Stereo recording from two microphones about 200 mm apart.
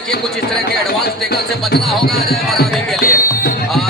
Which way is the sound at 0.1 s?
55° left (ahead or behind).